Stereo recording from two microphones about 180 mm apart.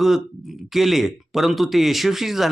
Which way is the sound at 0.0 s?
Centre (ahead or behind).